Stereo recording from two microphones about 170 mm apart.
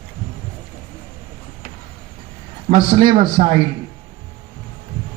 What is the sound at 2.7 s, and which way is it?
Speech, 35° right (ahead or behind).